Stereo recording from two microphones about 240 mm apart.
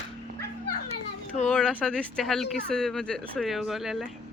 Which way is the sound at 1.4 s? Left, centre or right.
Centre.